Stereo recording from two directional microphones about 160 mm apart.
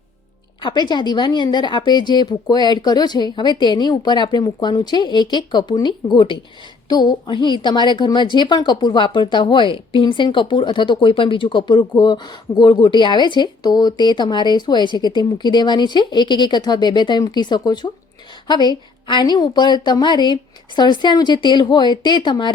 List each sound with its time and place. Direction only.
0.6 s a woman's voice: 25° left (ahead or behind)